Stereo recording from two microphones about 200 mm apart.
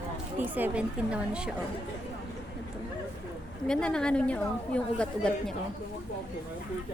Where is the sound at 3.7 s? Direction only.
5° left (ahead or behind).